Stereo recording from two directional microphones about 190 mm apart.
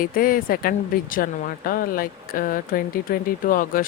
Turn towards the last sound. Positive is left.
turn(degrees=45)  # may be behind; listen again after turning